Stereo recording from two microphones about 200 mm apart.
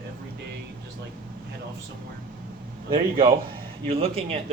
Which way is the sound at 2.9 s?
25° right (ahead or behind).